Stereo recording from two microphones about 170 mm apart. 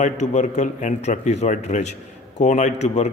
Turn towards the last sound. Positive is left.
turn(degrees=40)  # may be behind; listen again after turning